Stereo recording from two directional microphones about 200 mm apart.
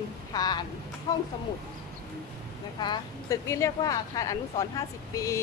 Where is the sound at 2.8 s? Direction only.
20° left (ahead or behind).